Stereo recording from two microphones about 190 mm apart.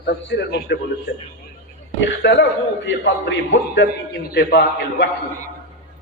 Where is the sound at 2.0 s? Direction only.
65° left (ahead or behind).